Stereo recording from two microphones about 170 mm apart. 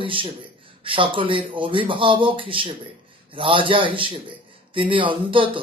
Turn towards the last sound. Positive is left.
turn(degrees=-30)  # may be behind; listen again after turning